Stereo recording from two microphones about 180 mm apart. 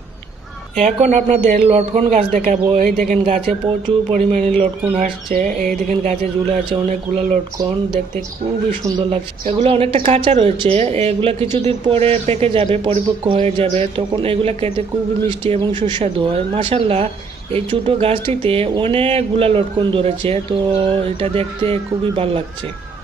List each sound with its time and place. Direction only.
0.7 s speech: 40° right (ahead or behind)
3.1 s speech: 30° right (ahead or behind)
5.0 s speech: 45° right (ahead or behind)
5.9 s speech: 35° right (ahead or behind)
8.8 s speech: 30° right (ahead or behind)
15.8 s speech: 40° right (ahead or behind)
16.5 s speech: 30° right (ahead or behind)